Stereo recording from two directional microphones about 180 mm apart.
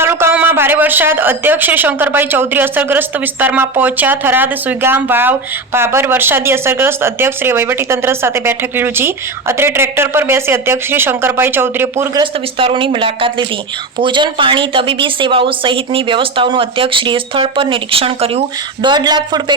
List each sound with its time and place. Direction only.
0.0 s a woman's voice: 15° right (ahead or behind)
12.2 s a woman's voice: 30° right (ahead or behind)